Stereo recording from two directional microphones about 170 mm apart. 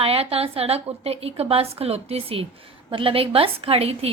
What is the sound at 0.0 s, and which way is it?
A woman's voice, 35° right (ahead or behind).